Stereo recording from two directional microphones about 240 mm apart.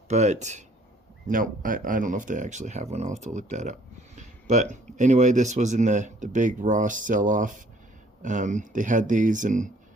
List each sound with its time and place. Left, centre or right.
0.1 s speech: right